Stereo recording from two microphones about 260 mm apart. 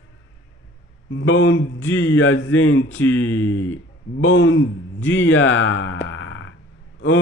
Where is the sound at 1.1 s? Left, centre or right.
Left.